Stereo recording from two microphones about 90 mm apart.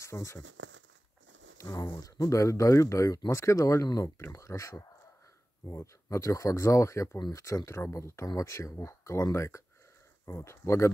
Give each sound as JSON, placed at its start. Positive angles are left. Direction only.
{"t": 0.0, "sound": "speech", "side_deg": 35}
{"t": 2.0, "sound": "speech", "side_deg": 45}